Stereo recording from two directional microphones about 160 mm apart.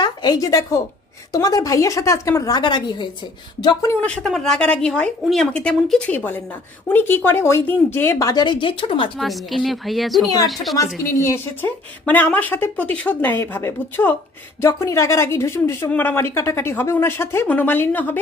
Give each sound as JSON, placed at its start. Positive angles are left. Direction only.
{"t": 0.0, "sound": "a woman's voice", "side_deg": 25}
{"t": 4.0, "sound": "a woman's voice", "side_deg": 5}
{"t": 9.1, "sound": "a woman's voice", "side_deg": 0}
{"t": 10.2, "sound": "a woman's voice", "side_deg": 25}
{"t": 10.5, "sound": "a woman's voice", "side_deg": 0}
{"t": 11.2, "sound": "a woman's voice", "side_deg": 15}